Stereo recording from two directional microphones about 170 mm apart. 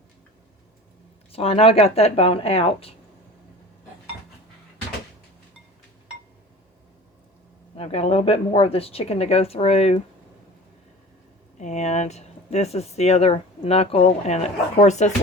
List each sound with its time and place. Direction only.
1.3 s speech: 35° left (ahead or behind)
7.8 s speech: 35° left (ahead or behind)
11.6 s speech: 40° left (ahead or behind)